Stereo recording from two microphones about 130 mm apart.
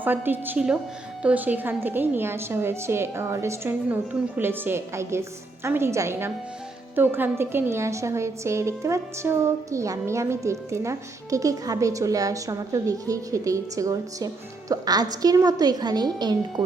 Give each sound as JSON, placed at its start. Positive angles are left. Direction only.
{"t": 0.0, "sound": "a woman's voice", "side_deg": -15}